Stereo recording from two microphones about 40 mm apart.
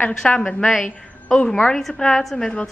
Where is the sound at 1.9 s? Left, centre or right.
Left.